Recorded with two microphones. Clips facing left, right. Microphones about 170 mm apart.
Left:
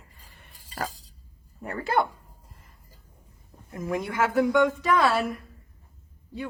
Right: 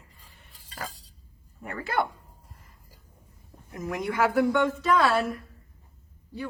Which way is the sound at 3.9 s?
25° left (ahead or behind).